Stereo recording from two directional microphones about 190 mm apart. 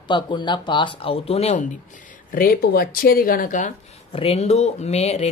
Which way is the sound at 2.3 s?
50° left (ahead or behind).